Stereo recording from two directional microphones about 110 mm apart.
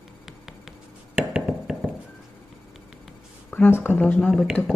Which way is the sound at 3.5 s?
20° left (ahead or behind).